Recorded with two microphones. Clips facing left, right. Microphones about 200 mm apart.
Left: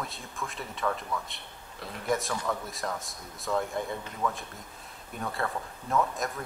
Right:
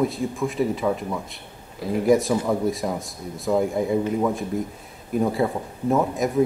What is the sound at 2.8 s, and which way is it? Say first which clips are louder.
Speech: right 8 dB; 10° right (ahead or behind).